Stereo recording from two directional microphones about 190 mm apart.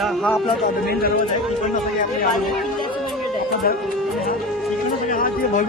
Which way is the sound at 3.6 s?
50° left (ahead or behind).